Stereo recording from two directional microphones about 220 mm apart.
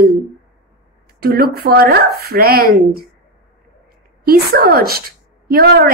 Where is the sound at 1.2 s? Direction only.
45° right (ahead or behind).